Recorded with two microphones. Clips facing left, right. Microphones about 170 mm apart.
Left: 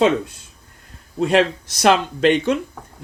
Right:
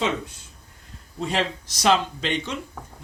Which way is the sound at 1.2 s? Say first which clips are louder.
Left 9 dB; 60° left (ahead or behind).